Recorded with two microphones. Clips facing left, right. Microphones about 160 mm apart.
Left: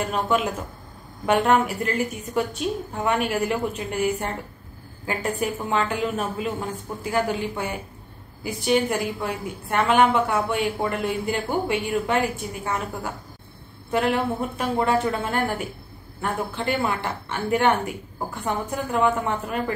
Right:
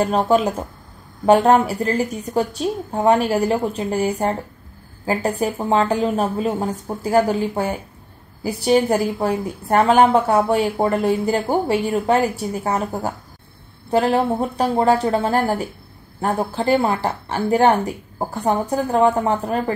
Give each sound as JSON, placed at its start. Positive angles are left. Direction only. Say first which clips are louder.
{"t": 0.0, "sound": "a woman's voice", "louder": "right 6 dB", "side_deg": -35}